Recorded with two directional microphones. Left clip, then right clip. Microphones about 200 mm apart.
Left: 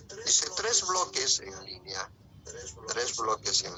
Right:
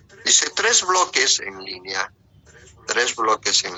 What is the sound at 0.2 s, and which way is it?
A man's voice, 45° right (ahead or behind).